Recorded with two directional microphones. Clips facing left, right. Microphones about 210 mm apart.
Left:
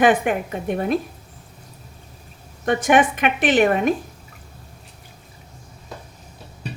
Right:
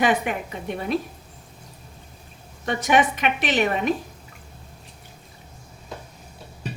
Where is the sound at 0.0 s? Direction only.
50° left (ahead or behind).